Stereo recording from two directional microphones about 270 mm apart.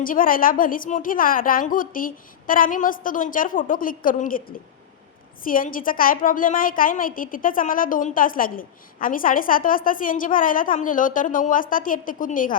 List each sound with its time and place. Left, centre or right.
0.0 s a woman's voice: left